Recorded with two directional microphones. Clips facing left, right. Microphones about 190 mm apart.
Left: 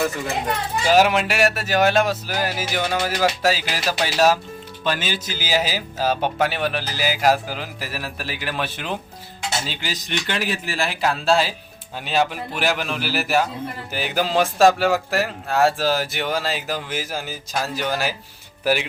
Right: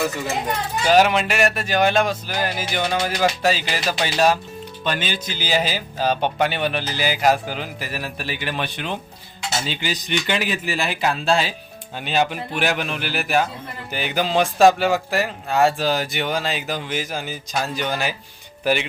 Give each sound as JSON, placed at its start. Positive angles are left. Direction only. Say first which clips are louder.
{"t": 0.9, "sound": "speech", "louder": "right 1 dB", "side_deg": 5}